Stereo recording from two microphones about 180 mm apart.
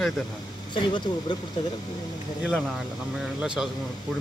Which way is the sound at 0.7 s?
25° left (ahead or behind).